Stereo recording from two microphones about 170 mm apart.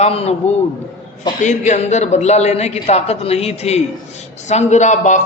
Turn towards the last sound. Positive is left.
turn(degrees=45)  # may be behind; listen again after turning